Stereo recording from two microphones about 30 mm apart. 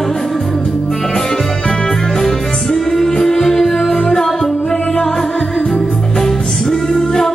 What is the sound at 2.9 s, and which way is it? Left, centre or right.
Music, centre.